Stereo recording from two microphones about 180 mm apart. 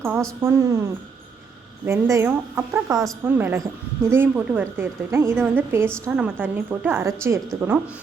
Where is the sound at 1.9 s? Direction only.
15° right (ahead or behind).